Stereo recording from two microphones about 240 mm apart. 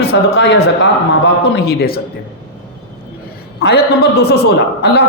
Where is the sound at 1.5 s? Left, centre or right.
Left.